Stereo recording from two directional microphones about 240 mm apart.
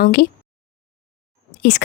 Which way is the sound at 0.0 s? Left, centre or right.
Left.